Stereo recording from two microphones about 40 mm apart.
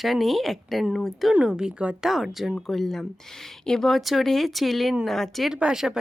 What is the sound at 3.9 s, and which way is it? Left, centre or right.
Speech, centre.